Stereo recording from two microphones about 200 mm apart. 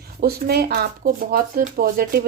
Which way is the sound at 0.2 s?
50° right (ahead or behind).